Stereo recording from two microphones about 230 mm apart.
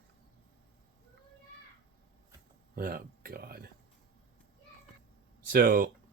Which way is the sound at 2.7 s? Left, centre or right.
Right.